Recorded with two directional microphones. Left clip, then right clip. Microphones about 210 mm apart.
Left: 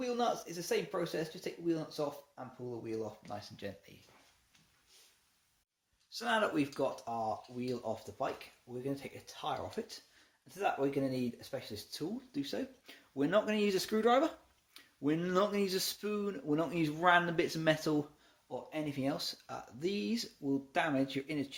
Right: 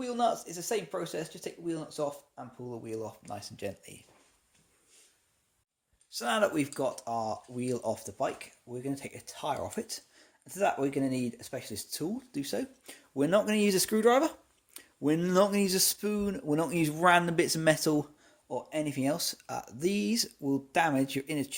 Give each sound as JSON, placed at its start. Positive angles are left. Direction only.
{"t": 0.0, "sound": "speech", "side_deg": -30}
{"t": 6.1, "sound": "speech", "side_deg": -40}